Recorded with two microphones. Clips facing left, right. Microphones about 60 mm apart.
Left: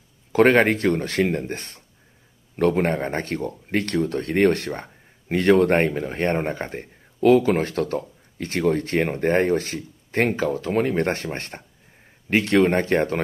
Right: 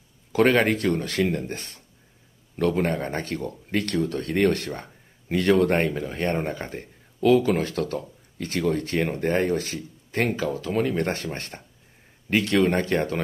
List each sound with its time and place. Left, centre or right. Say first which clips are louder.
0.3 s speech: left 3 dB; left